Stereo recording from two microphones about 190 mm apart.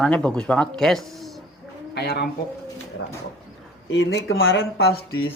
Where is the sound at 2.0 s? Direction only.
60° left (ahead or behind).